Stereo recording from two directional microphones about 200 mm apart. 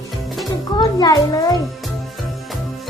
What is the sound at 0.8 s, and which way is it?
Speech, 20° left (ahead or behind).